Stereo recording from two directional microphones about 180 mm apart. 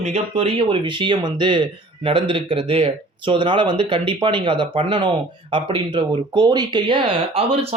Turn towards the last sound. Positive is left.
turn(degrees=-30)  # may be behind; listen again after turning